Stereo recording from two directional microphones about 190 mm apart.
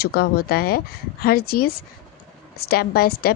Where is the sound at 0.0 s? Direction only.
55° left (ahead or behind).